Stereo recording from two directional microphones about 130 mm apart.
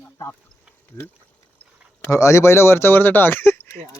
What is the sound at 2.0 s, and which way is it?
Speech, 20° left (ahead or behind).